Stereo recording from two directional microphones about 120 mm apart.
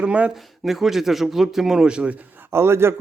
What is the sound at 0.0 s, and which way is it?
A man's voice, 10° right (ahead or behind).